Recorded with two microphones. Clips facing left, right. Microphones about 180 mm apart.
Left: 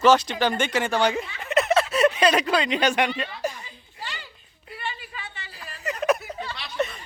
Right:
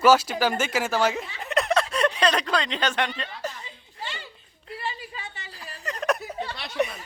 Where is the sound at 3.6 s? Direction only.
25° right (ahead or behind).